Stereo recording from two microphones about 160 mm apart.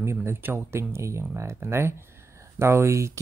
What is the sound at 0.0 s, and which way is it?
Speech, 15° right (ahead or behind).